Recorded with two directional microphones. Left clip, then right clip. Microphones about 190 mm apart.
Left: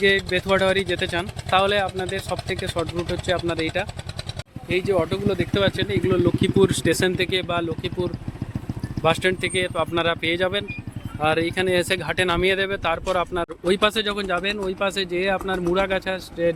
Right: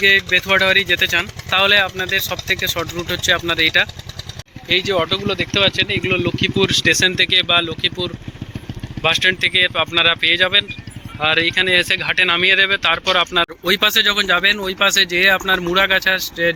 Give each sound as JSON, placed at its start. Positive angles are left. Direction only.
{"t": 0.3, "sound": "speech", "side_deg": 15}